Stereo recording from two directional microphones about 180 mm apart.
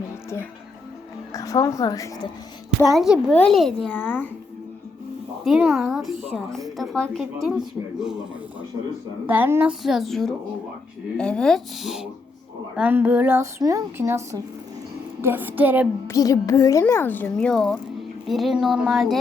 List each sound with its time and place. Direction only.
1.3 s speech: 20° left (ahead or behind)
2.8 s a woman's voice: centre (ahead or behind)
5.5 s a woman's voice: 5° right (ahead or behind)
9.2 s a woman's voice: 10° right (ahead or behind)
16.0 s a woman's voice: 20° left (ahead or behind); by 19.1 s centre (ahead or behind)